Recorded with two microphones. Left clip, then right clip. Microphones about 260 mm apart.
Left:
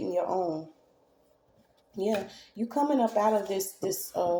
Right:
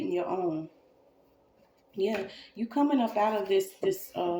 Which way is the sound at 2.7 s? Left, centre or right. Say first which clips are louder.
Left 1 dB; left.